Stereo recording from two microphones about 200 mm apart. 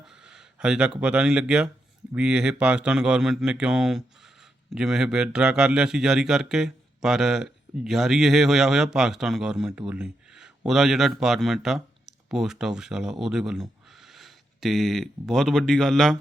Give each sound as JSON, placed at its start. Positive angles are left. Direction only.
{"t": 0.0, "sound": "a man's voice", "side_deg": -5}